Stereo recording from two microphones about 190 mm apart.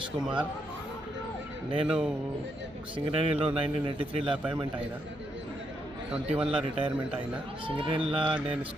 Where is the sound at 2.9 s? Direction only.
30° right (ahead or behind).